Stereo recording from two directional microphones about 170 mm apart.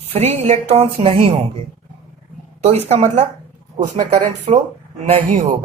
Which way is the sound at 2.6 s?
35° right (ahead or behind).